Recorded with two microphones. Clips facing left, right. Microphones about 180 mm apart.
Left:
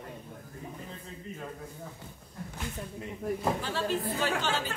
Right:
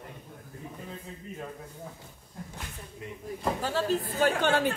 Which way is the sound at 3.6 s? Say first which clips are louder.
Right 3 dB; 40° right (ahead or behind).